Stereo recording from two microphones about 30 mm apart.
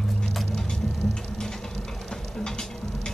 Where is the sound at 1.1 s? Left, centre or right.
Left.